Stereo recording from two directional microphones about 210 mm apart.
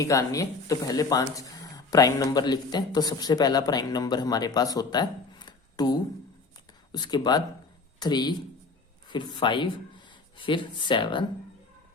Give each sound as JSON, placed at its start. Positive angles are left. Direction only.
{"t": 0.0, "sound": "speech", "side_deg": 15}